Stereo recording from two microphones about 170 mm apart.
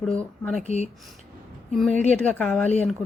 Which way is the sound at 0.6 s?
40° left (ahead or behind).